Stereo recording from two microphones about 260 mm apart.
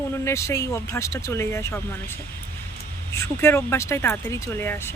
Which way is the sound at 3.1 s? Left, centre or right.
Centre.